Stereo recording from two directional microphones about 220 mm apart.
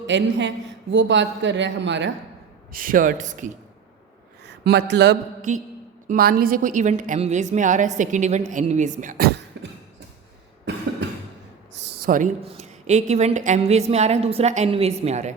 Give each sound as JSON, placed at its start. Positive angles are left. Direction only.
{"t": 0.1, "sound": "a woman's voice", "side_deg": -55}
{"t": 2.7, "sound": "a woman's voice", "side_deg": -40}
{"t": 4.4, "sound": "speech", "side_deg": -50}
{"t": 5.4, "sound": "a woman's voice", "side_deg": -35}
{"t": 9.5, "sound": "a sound", "side_deg": -55}
{"t": 11.7, "sound": "a woman's voice", "side_deg": -45}